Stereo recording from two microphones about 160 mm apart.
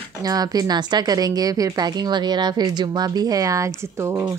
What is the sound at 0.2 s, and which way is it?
A woman's voice, 25° right (ahead or behind).